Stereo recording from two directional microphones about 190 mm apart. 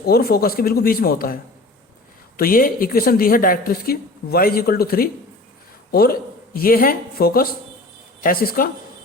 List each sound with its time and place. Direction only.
0.0 s a woman's voice: 55° left (ahead or behind)